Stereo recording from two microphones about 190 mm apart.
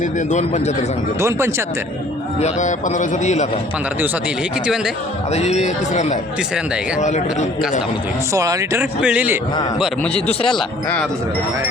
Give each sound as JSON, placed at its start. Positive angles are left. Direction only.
{"t": 0.0, "sound": "a man's voice", "side_deg": 40}
{"t": 1.2, "sound": "speech", "side_deg": -15}
{"t": 2.4, "sound": "a man's voice", "side_deg": 40}
{"t": 5.3, "sound": "a man's voice", "side_deg": 35}
{"t": 8.3, "sound": "speech", "side_deg": -15}
{"t": 9.8, "sound": "speech", "side_deg": 5}